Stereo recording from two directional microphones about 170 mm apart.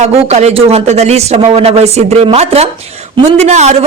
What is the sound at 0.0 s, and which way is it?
A man's voice, 40° right (ahead or behind).